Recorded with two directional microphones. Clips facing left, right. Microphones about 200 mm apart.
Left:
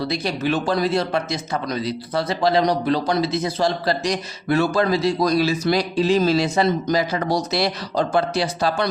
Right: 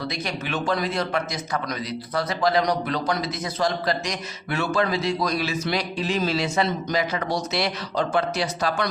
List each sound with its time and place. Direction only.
0.0 s a man's voice: 30° left (ahead or behind)